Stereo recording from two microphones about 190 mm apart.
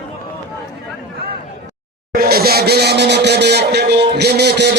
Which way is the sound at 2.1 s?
55° right (ahead or behind).